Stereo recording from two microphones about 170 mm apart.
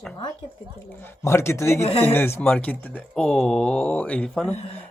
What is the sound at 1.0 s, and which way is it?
Speech, 15° left (ahead or behind).